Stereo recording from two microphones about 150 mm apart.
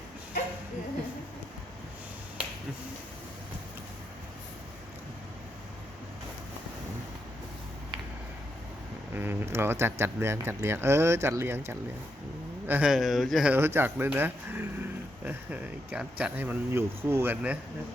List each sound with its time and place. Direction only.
9.1 s speech: 15° right (ahead or behind)
13.6 s speech: 15° right (ahead or behind)